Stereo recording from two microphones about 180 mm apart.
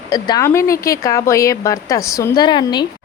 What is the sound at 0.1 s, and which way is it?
Speech, 20° left (ahead or behind).